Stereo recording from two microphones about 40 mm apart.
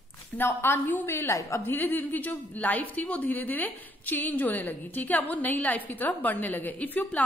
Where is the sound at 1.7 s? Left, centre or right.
Left.